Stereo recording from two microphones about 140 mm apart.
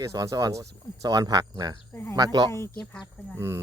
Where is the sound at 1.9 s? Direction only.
15° left (ahead or behind).